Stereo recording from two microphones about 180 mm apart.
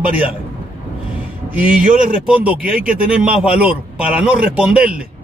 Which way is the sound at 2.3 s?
5° right (ahead or behind).